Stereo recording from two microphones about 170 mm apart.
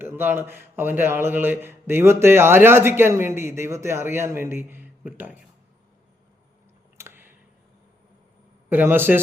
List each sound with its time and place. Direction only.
0.0 s a man's voice: 15° right (ahead or behind)
6.9 s a sound: 15° right (ahead or behind)
8.7 s a man's voice: 10° right (ahead or behind)